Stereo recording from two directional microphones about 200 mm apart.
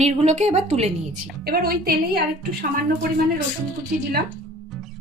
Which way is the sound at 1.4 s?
50° right (ahead or behind).